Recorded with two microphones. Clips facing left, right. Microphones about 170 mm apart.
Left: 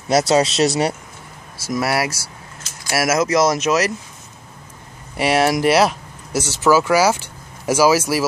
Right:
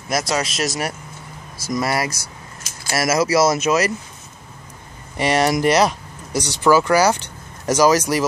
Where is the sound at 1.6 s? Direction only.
5° left (ahead or behind).